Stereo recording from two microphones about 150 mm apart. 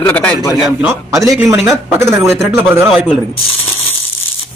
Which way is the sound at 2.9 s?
Centre (ahead or behind).